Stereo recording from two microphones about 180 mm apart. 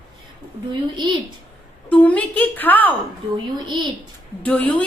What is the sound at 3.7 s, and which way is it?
Speech, 25° right (ahead or behind).